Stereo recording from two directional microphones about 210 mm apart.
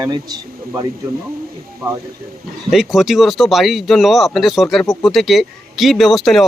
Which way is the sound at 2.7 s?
Centre (ahead or behind).